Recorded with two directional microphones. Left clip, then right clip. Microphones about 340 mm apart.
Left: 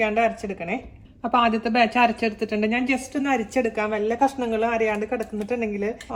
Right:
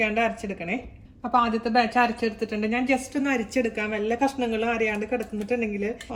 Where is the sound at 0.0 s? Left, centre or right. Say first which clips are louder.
Left 3 dB; centre.